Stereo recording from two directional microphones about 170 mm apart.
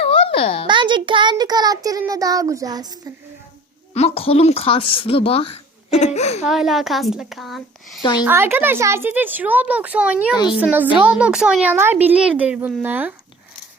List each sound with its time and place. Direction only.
0.0 s a sound: 30° left (ahead or behind)
0.7 s a child's voice: 30° right (ahead or behind)
3.9 s a woman's voice: 35° left (ahead or behind)
6.4 s speech: centre (ahead or behind)
8.2 s speech: 15° right (ahead or behind)
10.3 s a woman's voice: 25° left (ahead or behind)
10.6 s speech: 10° right (ahead or behind)